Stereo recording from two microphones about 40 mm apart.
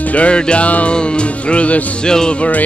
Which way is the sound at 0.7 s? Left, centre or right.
Left.